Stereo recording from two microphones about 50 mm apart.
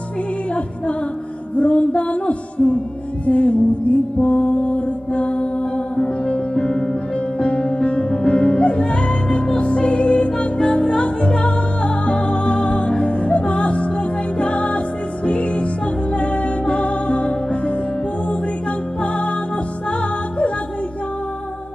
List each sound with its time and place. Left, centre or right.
1.6 s music: left
19.9 s music: left